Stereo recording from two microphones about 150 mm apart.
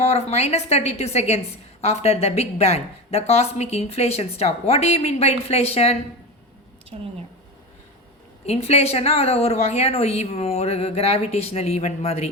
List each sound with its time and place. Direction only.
0.0 s a woman's voice: 45° left (ahead or behind)
8.4 s a woman's voice: 45° left (ahead or behind)